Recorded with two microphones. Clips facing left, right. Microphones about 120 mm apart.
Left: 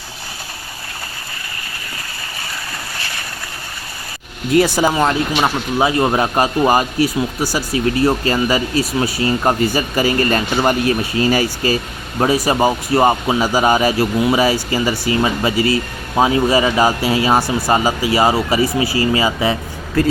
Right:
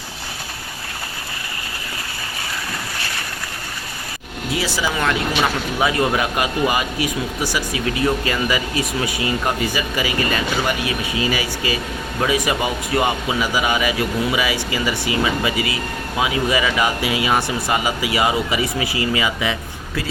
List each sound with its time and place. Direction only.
4.5 s speech: 50° left (ahead or behind)
4.9 s speech: 30° left (ahead or behind)
20.0 s speech: 45° left (ahead or behind)